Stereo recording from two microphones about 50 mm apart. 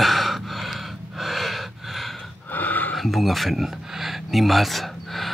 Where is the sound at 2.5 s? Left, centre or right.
Left.